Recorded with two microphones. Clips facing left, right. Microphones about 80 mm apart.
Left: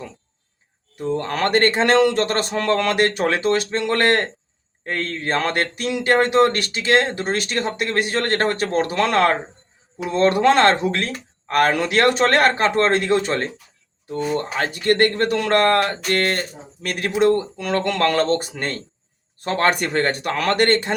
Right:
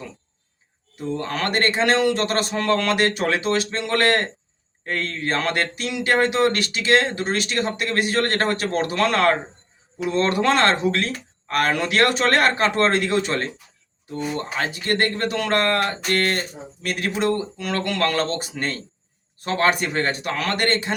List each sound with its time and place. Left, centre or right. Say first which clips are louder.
0.9 s speech: left 3 dB; left